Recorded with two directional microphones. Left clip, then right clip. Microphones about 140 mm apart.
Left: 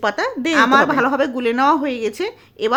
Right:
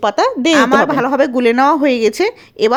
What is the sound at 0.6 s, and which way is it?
Speech, 40° right (ahead or behind).